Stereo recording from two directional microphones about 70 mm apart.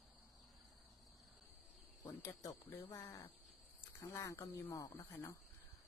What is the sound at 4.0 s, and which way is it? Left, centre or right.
Speech, left.